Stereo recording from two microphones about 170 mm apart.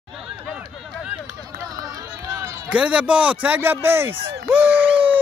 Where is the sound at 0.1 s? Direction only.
Centre (ahead or behind).